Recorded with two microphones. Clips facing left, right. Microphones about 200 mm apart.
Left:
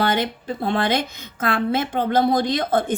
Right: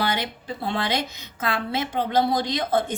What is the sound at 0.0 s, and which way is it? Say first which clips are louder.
A woman's voice: left 5 dB; 50° left (ahead or behind).